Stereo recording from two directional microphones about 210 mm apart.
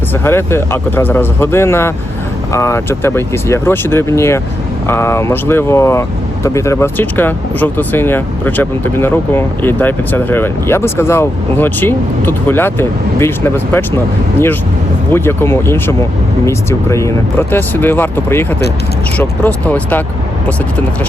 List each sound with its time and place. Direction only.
0.3 s speech: 10° left (ahead or behind)
15.1 s speech: 10° left (ahead or behind)